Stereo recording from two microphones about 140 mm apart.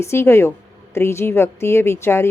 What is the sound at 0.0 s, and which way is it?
A woman's voice, 20° left (ahead or behind).